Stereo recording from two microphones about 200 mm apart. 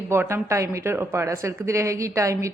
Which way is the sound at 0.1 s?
10° right (ahead or behind).